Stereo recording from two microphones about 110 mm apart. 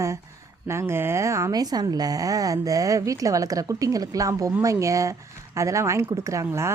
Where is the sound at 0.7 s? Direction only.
25° right (ahead or behind).